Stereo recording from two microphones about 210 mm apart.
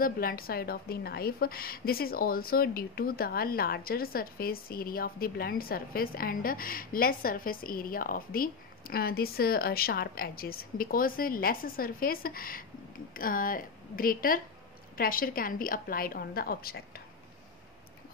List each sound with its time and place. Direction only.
0.0 s a woman's voice: 45° left (ahead or behind)